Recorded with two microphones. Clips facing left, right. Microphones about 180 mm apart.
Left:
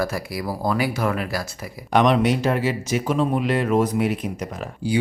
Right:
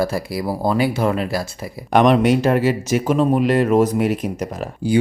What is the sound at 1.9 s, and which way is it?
Speech, 50° right (ahead or behind).